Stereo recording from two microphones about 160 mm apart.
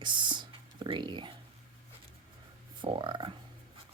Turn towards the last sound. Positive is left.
turn(degrees=-30)  # may be behind; listen again after turning